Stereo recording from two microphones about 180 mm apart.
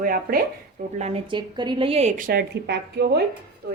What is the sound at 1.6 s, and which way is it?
A woman's voice, 25° right (ahead or behind).